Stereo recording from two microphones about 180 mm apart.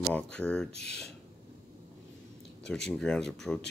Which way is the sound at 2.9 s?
5° left (ahead or behind).